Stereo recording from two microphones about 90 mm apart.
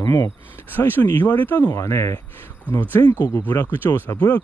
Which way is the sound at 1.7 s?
30° left (ahead or behind).